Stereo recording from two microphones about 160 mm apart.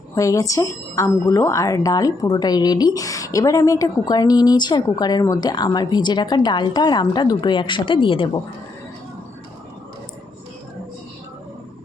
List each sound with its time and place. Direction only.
0.1 s speech: 20° left (ahead or behind)